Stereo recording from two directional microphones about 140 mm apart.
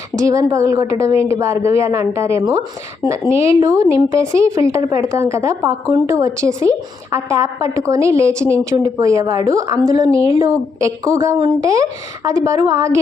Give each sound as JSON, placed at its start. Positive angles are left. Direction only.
{"t": 0.2, "sound": "a woman's voice", "side_deg": -20}